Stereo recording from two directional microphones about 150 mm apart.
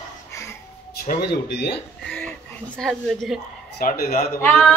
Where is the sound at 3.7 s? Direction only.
85° left.